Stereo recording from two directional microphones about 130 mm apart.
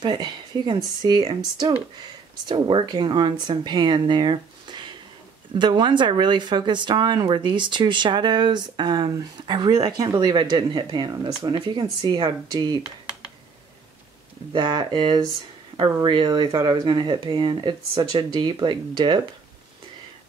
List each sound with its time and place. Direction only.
0.0 s speech: 35° right (ahead or behind)
14.5 s speech: 35° right (ahead or behind)